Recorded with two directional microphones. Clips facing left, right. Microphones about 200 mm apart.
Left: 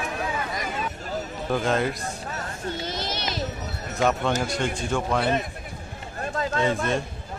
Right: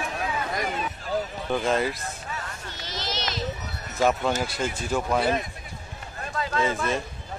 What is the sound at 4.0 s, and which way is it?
A man's voice, 5° right (ahead or behind).